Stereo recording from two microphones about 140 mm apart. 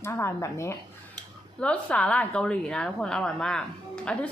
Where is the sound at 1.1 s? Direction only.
5° left (ahead or behind).